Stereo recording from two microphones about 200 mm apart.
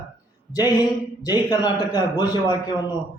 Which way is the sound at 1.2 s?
20° left (ahead or behind).